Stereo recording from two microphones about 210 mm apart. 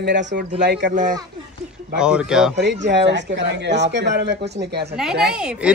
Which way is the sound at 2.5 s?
55° right (ahead or behind).